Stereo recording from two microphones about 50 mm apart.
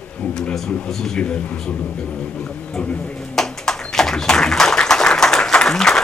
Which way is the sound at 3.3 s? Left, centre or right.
Centre.